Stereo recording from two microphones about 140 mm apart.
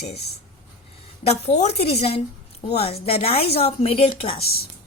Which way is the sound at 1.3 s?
50° left (ahead or behind).